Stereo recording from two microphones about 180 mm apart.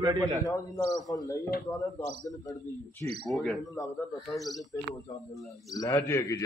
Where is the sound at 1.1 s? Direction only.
20° left (ahead or behind).